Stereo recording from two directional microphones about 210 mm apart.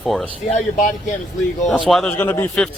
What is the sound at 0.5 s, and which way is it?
Speech, 40° left (ahead or behind).